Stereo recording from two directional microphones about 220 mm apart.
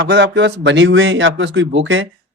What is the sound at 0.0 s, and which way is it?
Speech, 50° right (ahead or behind).